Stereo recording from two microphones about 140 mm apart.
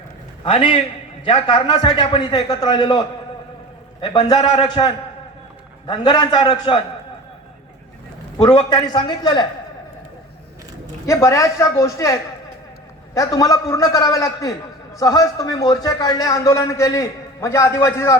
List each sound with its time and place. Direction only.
0.4 s a man's voice: 40° left (ahead or behind)
8.7 s a man's voice: 30° left (ahead or behind)
11.0 s speech: 20° left (ahead or behind)
13.1 s speech: 25° left (ahead or behind)